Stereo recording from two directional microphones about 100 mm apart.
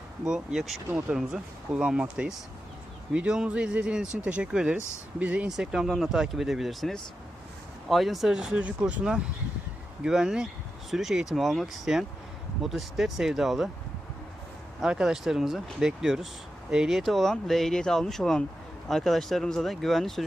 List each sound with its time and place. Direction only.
0.3 s speech: 5° right (ahead or behind)
0.9 s speech: 15° right (ahead or behind)
14.8 s speech: 5° right (ahead or behind)